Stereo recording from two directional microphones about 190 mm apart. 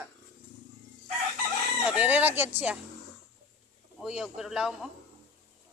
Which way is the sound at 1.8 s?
5° right (ahead or behind).